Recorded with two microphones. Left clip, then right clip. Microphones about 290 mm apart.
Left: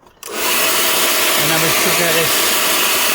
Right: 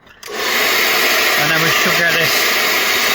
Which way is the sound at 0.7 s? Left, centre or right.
Left.